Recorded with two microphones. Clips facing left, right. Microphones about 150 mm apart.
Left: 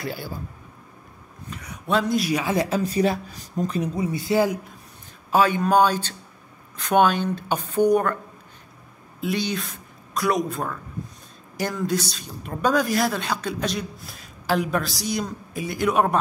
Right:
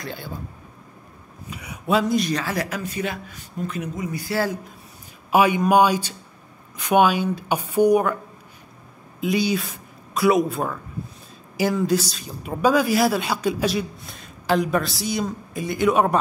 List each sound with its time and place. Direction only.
0.0 s a woman's voice: 5° left (ahead or behind)
1.5 s speech: 10° right (ahead or behind)
2.4 s speech: 25° left (ahead or behind)
2.8 s speech: 35° left (ahead or behind); by 4.6 s 20° left (ahead or behind)
5.3 s speech: 15° right (ahead or behind)
9.2 s a woman's voice: 5° right (ahead or behind)